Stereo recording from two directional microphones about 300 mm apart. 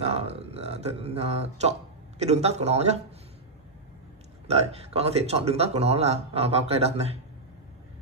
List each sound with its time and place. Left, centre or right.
0.0 s speech: centre
4.5 s speech: centre